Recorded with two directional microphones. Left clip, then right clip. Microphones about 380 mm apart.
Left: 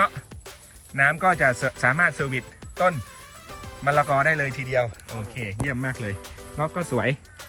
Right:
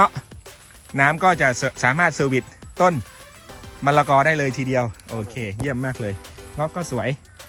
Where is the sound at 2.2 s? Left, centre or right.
Left.